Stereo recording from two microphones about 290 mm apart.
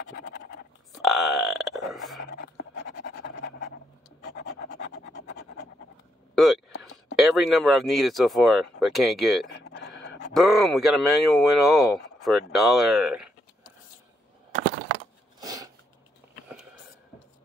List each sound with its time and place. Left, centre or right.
0.1 s scratch: left
0.9 s burping: centre
2.3 s pant: left
4.3 s rub: left
6.3 s a sound: centre
7.2 s speech: centre
9.5 s a sound: left
10.3 s speech: centre
15.4 s throat clearing: centre